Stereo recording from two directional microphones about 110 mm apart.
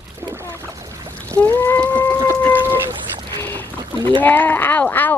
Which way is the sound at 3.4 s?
20° left (ahead or behind).